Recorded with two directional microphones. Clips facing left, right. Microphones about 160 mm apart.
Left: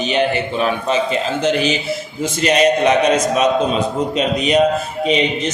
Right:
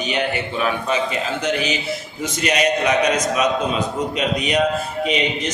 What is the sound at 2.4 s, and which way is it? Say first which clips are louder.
Speech: left 5 dB; 30° left (ahead or behind).